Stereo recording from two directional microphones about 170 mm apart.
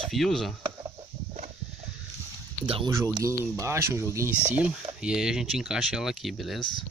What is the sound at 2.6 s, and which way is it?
Speech, 30° right (ahead or behind).